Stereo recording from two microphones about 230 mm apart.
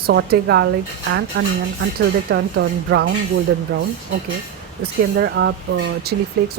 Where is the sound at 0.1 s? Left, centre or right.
Right.